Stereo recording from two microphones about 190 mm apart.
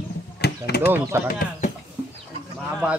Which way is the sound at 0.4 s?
55° left (ahead or behind).